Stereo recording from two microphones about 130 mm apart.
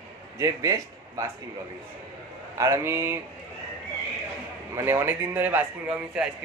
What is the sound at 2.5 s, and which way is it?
Speech, 20° right (ahead or behind).